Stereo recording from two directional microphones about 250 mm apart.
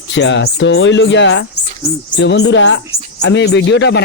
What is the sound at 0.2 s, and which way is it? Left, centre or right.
Speech, left.